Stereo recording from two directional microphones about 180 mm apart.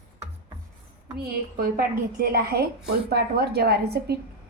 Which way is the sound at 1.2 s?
55° right (ahead or behind).